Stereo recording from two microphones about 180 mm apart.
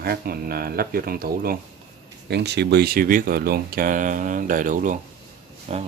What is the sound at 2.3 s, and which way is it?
Speech, 70° right (ahead or behind).